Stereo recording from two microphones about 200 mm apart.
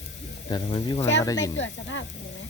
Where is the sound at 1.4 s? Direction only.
65° left (ahead or behind).